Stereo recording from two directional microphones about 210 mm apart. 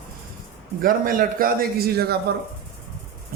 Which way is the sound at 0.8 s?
40° right (ahead or behind).